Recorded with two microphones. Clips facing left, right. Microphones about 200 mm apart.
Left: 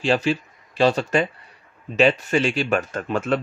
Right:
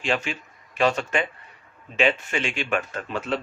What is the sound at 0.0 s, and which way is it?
Speech, 35° left (ahead or behind).